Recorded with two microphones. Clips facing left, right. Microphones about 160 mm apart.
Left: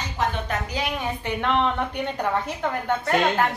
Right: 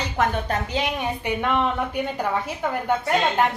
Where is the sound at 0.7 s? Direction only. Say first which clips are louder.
Right 2 dB; 15° right (ahead or behind).